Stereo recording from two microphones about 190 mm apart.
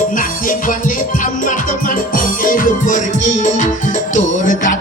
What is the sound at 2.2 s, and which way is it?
Music, 45° left (ahead or behind).